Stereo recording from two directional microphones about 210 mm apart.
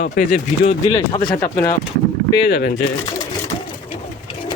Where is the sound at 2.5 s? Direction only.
40° left (ahead or behind).